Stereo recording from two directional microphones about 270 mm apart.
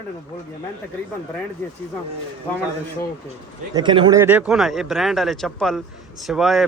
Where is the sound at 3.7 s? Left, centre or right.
Centre.